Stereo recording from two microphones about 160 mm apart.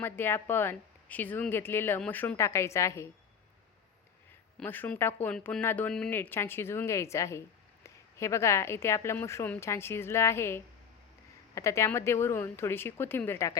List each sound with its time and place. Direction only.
0.0 s speech: 15° left (ahead or behind)
4.6 s speech: 10° left (ahead or behind)